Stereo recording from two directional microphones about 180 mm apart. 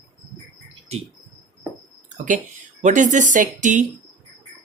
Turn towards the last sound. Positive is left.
turn(degrees=-45)  # may be behind; listen again after turning